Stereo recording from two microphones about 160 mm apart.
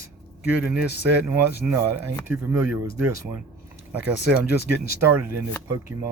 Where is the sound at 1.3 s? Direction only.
15° right (ahead or behind).